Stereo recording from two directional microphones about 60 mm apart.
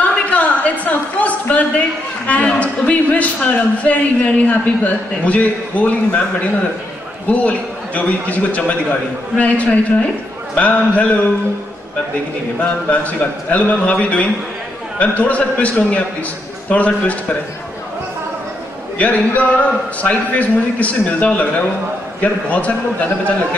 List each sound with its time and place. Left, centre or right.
0.0 s a sound: left
2.2 s a man's voice: left
7.2 s a man's voice: left
12.5 s a man's voice: left
18.9 s a man's voice: left